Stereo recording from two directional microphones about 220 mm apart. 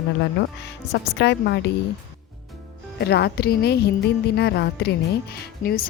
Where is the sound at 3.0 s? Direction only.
50° left (ahead or behind).